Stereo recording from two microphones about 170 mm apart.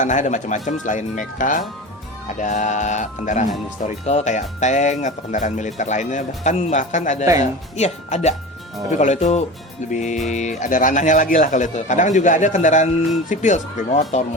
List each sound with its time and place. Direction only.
0.0 s speech: 45° left (ahead or behind)